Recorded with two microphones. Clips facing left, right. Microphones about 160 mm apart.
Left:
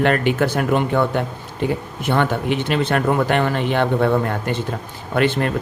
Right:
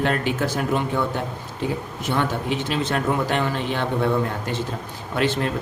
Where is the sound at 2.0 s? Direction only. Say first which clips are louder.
Left 5 dB; 65° left (ahead or behind).